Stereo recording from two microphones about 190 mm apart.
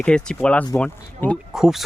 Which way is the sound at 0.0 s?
5° left (ahead or behind).